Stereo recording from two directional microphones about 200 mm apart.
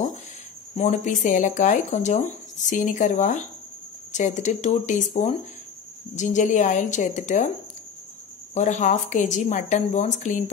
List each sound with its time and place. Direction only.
0.7 s speech: 35° left (ahead or behind)
8.5 s speech: 35° left (ahead or behind)